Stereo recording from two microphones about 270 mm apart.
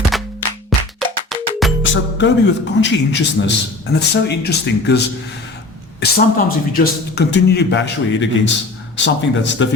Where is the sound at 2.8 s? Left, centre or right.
Left.